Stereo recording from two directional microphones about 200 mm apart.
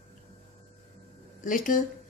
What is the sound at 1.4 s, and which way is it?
Speech, 40° left (ahead or behind).